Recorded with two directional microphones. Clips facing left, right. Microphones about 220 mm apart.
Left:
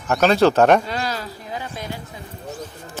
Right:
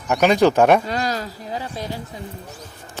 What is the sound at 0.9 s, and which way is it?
Speech, 45° right (ahead or behind).